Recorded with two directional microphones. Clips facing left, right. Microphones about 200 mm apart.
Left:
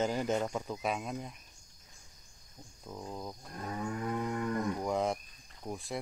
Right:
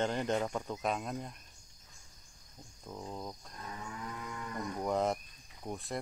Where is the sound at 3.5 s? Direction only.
55° left (ahead or behind).